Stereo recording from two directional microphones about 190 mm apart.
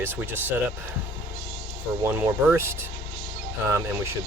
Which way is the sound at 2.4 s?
15° right (ahead or behind).